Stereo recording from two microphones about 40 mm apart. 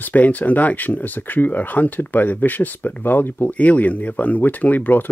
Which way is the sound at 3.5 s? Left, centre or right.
Left.